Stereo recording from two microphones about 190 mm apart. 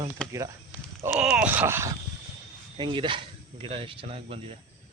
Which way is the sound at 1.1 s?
5° right (ahead or behind).